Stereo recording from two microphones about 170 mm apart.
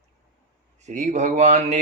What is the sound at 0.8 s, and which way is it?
Speech, 45° right (ahead or behind).